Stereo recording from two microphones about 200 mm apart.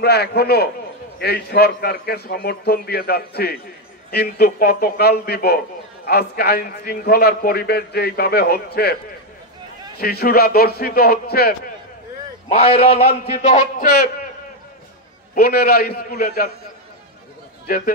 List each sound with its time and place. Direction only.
0.0 s a man's voice: 55° left (ahead or behind)
9.9 s a man's voice: 50° left (ahead or behind)
12.4 s a man's voice: 30° left (ahead or behind); by 14.1 s 45° left (ahead or behind)
15.3 s a man's voice: 50° left (ahead or behind)
17.6 s a man's voice: 50° left (ahead or behind)